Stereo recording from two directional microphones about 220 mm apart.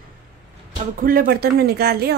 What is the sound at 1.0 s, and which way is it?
Speech, 40° right (ahead or behind).